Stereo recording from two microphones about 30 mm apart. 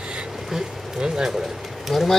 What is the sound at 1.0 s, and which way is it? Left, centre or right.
Speech, right.